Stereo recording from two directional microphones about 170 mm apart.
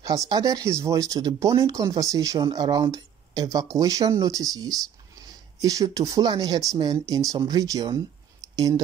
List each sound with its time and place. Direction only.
0.0 s speech: 20° right (ahead or behind)